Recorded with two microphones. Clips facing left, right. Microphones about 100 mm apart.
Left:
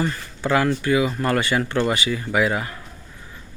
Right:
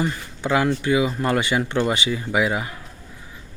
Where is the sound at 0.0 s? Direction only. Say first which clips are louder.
Even; 15° right (ahead or behind).